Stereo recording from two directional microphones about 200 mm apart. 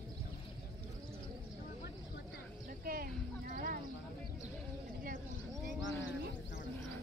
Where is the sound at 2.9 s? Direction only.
45° right (ahead or behind).